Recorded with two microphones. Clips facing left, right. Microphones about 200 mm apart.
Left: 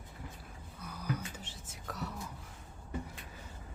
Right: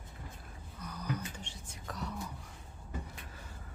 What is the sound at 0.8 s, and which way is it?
Whispering, 10° left (ahead or behind).